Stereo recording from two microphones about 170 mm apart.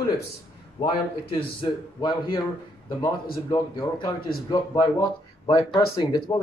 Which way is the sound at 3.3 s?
25° left (ahead or behind).